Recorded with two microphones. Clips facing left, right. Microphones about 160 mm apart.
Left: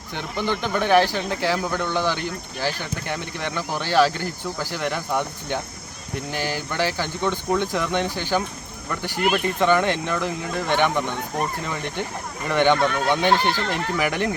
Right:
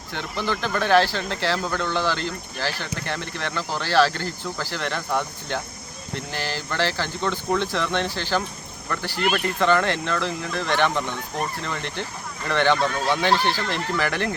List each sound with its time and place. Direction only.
0.1 s speech: 15° left (ahead or behind)